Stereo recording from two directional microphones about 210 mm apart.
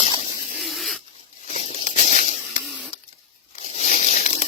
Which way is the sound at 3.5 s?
35° left (ahead or behind).